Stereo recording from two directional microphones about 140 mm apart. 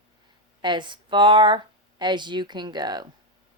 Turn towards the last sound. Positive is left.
turn(degrees=-30)  # may be behind; listen again after turning